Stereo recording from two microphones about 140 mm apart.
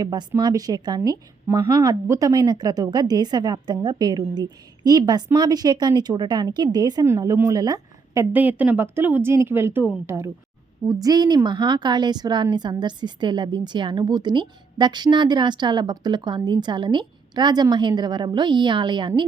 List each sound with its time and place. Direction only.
0.0 s a woman's voice: 30° right (ahead or behind); by 10.2 s 15° right (ahead or behind)
10.8 s a woman's voice: 25° right (ahead or behind)